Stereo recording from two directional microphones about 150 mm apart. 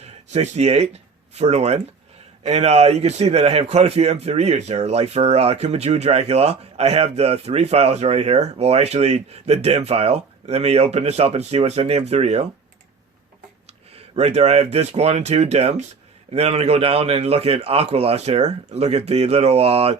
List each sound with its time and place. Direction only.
0.0 s a man's voice: 50° right (ahead or behind)
13.9 s a man's voice: 45° right (ahead or behind)